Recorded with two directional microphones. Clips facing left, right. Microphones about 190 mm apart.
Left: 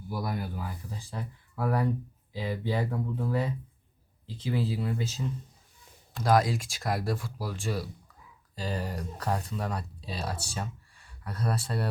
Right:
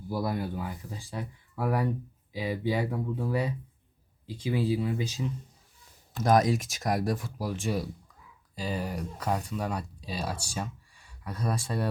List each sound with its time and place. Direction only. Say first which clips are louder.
0.1 s speech: right 3 dB; 25° right (ahead or behind)
0.9 s speech: right 1 dB; 15° right (ahead or behind)
6.2 s speech: right 2 dB; 20° right (ahead or behind)